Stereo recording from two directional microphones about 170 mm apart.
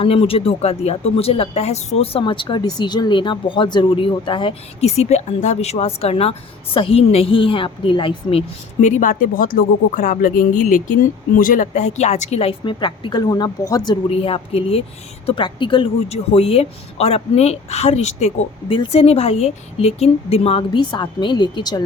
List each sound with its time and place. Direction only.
0.0 s speech: 35° left (ahead or behind)
9.0 s speech: 55° left (ahead or behind); by 13.9 s 25° left (ahead or behind)
14.1 s speech: 35° left (ahead or behind)